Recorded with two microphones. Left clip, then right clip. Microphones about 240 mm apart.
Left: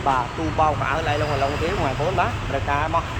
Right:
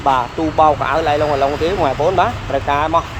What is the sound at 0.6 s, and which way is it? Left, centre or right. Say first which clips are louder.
Speech: right 8 dB; right.